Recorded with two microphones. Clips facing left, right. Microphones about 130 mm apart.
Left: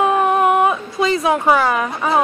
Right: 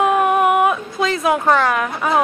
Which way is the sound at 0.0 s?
5° right (ahead or behind).